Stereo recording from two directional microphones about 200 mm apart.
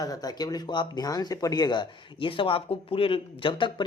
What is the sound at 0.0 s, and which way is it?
Speech, 20° left (ahead or behind).